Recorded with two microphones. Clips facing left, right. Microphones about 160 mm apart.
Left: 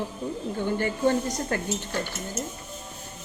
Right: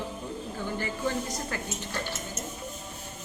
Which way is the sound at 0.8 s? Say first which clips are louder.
Left 7 dB; 50° left (ahead or behind).